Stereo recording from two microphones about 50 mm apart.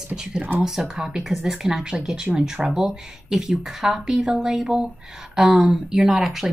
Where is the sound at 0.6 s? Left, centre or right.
Centre.